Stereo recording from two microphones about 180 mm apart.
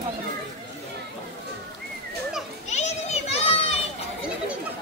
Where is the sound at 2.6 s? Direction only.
40° left (ahead or behind).